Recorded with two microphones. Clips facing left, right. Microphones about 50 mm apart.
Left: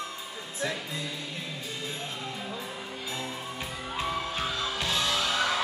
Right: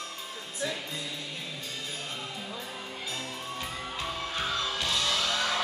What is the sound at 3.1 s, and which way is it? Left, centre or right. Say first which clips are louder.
Music: left 2 dB; left.